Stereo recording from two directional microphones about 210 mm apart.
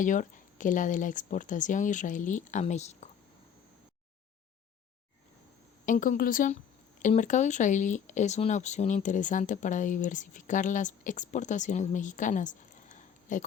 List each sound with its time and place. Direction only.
0.0 s speech: 35° left (ahead or behind)
5.8 s speech: 40° left (ahead or behind)